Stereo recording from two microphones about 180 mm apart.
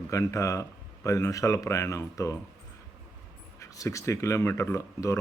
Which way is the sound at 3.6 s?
15° left (ahead or behind).